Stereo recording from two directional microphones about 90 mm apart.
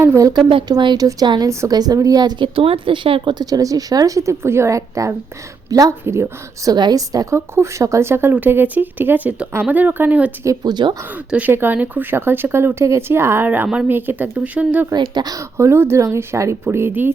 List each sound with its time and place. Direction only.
0.0 s a woman's voice: 35° right (ahead or behind)
0.7 s speech: 60° right (ahead or behind)
0.9 s a woman's voice: 45° right (ahead or behind)
2.6 s speech: 80° right; by 3.4 s 65° right (ahead or behind)
3.4 s a woman's voice: 40° right (ahead or behind)
7.3 s speech: 30° right (ahead or behind)
10.4 s a woman's voice: 40° right (ahead or behind)
11.3 s speech: 15° right (ahead or behind)
14.9 s a woman's voice: 55° right (ahead or behind)
15.5 s speech: 30° right (ahead or behind)